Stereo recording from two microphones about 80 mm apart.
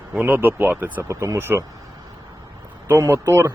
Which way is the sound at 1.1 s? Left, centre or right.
Right.